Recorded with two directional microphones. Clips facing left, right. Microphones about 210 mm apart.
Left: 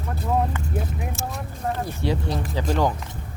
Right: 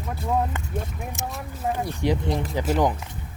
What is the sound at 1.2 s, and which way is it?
Speech, 20° right (ahead or behind).